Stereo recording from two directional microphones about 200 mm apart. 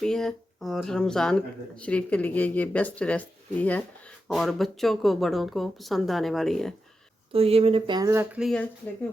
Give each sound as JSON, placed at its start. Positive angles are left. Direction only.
{"t": 0.0, "sound": "speech", "side_deg": 5}
{"t": 7.3, "sound": "speech", "side_deg": -30}